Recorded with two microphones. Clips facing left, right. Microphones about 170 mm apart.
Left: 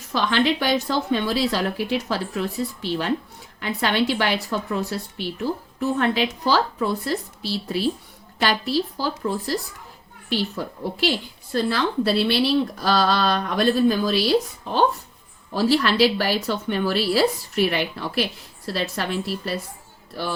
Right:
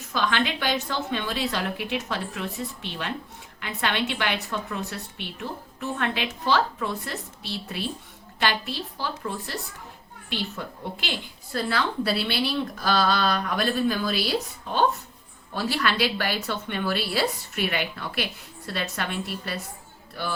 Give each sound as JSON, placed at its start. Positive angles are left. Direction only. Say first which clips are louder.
{"t": 0.1, "sound": "a woman's voice", "louder": "left 5 dB", "side_deg": 35}